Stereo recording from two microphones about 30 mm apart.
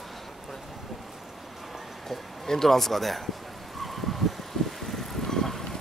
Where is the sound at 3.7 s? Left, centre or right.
Centre.